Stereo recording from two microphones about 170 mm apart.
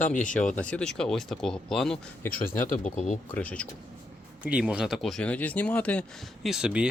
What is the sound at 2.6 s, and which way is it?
Speech, 50° left (ahead or behind).